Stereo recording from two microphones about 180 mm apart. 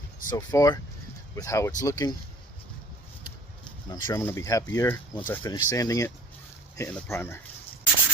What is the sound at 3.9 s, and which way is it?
Speech, 15° left (ahead or behind).